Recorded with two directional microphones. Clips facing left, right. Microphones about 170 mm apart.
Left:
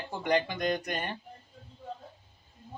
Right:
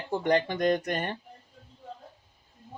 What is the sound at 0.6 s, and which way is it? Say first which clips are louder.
Speech: right 5 dB; 45° right (ahead or behind).